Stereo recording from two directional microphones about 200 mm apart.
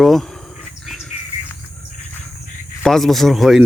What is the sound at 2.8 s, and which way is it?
Speech, centre (ahead or behind).